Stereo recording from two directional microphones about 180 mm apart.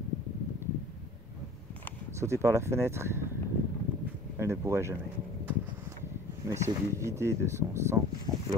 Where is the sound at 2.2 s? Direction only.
15° right (ahead or behind).